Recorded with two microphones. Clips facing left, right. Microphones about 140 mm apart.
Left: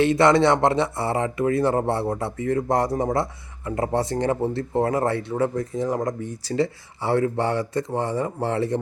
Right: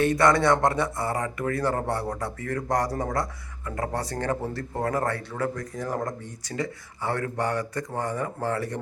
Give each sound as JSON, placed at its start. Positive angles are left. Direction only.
{"t": 0.0, "sound": "speech", "side_deg": 25}